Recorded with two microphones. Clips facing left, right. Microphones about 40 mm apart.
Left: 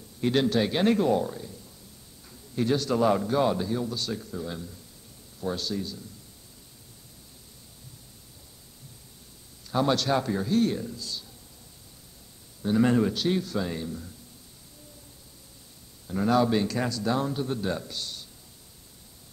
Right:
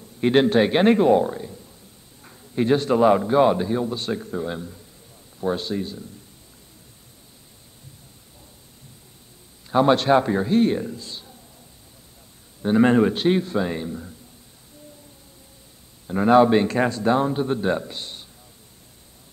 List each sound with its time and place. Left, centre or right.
0.2 s a man's voice: right
9.7 s a man's voice: right
12.6 s a man's voice: right
16.1 s a man's voice: right